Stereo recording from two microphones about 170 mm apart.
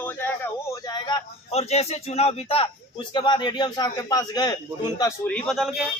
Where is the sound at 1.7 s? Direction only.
40° left (ahead or behind).